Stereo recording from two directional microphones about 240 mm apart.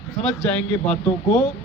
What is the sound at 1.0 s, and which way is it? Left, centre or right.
Speech, left.